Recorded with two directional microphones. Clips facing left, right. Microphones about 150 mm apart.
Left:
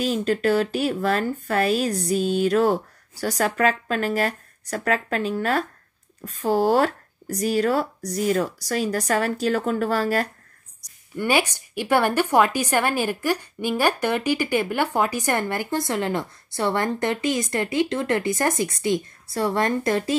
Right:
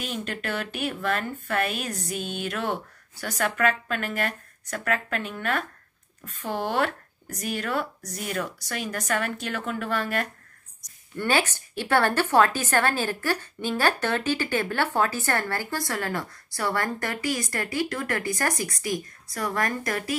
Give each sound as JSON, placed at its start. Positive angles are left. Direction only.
{"t": 0.0, "sound": "speech", "side_deg": 35}
{"t": 11.1, "sound": "a woman's voice", "side_deg": 10}